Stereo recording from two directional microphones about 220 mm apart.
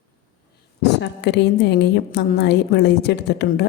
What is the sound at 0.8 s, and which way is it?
A woman's voice, 50° left (ahead or behind).